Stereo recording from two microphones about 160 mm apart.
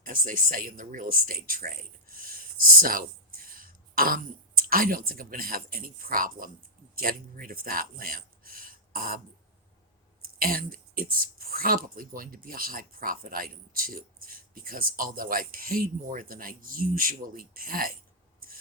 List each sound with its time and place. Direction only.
0.0 s speech: 60° right (ahead or behind)
10.2 s speech: 65° right (ahead or behind)